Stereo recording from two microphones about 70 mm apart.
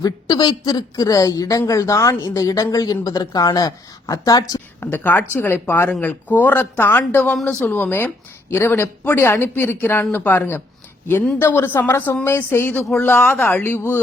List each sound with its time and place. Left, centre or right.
0.0 s speech: left
2.7 s speech: left
4.8 s speech: left
6.0 s speech: left